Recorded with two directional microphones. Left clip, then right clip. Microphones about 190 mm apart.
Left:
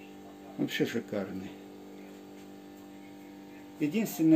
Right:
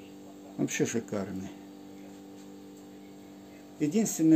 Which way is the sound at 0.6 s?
40° right (ahead or behind).